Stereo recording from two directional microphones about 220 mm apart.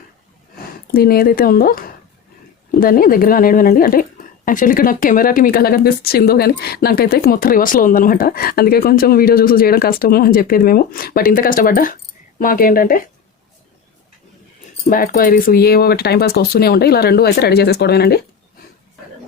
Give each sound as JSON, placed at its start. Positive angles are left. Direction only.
{"t": 0.9, "sound": "speech", "side_deg": 45}
{"t": 14.8, "sound": "speech", "side_deg": 40}